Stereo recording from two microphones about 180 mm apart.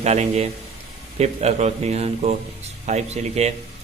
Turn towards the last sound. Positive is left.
turn(degrees=-35)  # may be behind; listen again after turning